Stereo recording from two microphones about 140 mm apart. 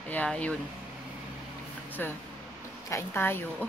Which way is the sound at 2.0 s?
15° left (ahead or behind).